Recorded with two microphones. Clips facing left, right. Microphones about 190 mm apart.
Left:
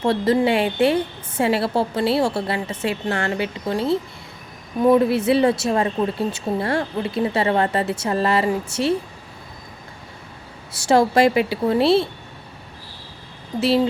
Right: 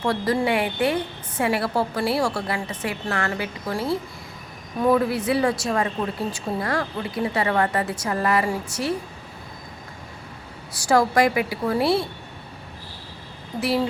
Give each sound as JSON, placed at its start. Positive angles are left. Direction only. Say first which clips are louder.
{"t": 0.0, "sound": "a woman's voice", "louder": "left 4 dB", "side_deg": 25}
{"t": 10.8, "sound": "a woman's voice", "louder": "left 3 dB", "side_deg": 25}
{"t": 13.6, "sound": "a woman's voice", "louder": "left 5 dB", "side_deg": 25}